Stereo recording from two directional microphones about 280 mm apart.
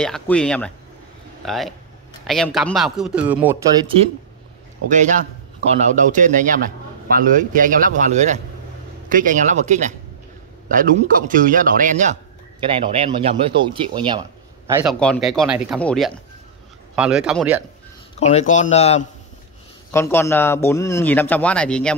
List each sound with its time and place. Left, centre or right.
0.0 s a man's voice: centre
4.8 s a man's voice: right; by 17.6 s centre
18.2 s speech: left
19.9 s a man's voice: centre